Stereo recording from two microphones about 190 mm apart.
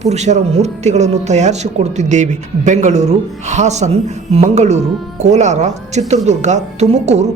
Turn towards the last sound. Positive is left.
turn(degrees=-35)  # may be behind; listen again after turning